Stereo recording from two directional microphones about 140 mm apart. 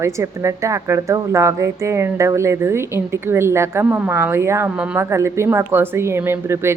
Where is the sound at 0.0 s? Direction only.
20° right (ahead or behind).